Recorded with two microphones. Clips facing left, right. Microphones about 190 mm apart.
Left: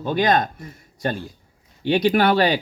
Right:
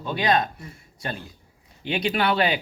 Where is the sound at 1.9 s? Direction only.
45° left (ahead or behind).